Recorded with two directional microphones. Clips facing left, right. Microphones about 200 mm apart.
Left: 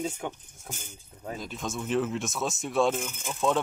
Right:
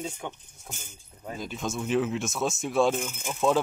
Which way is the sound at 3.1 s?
10° right (ahead or behind).